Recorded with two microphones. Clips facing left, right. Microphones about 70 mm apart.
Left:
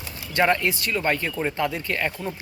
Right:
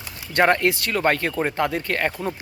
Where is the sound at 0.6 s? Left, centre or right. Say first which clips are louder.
Right 4 dB; right.